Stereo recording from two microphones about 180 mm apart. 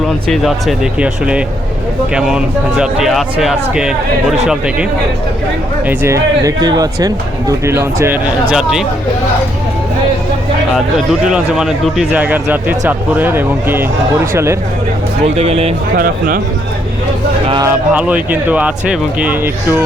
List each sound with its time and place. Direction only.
0.3 s speech: centre (ahead or behind)
5.9 s speech: 15° right (ahead or behind)
10.9 s speech: 5° right (ahead or behind)
15.2 s speech: 35° right (ahead or behind)
16.0 s speech: 55° right (ahead or behind)
17.7 s speech: 5° right (ahead or behind)